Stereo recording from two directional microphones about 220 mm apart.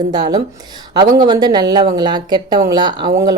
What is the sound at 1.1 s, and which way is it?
Speech, 20° right (ahead or behind).